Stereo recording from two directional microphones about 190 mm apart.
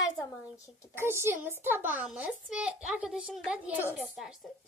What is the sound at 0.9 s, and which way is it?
A child's voice, 10° right (ahead or behind).